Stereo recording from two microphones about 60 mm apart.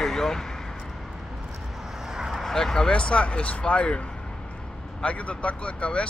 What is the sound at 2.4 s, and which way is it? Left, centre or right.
Speech, centre.